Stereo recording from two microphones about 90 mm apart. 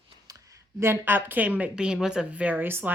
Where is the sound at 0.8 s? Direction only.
25° right (ahead or behind).